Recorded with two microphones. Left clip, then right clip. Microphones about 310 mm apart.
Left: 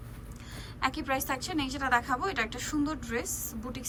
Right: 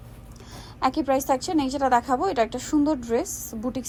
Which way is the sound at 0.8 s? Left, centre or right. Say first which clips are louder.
Right 8 dB; centre.